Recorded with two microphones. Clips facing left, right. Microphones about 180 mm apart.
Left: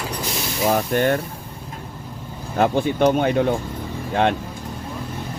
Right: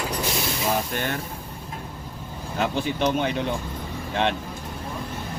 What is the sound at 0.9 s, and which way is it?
Speech, 50° left (ahead or behind).